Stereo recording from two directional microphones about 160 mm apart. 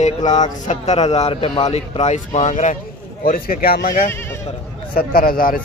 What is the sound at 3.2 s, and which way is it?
Speech, 65° left (ahead or behind).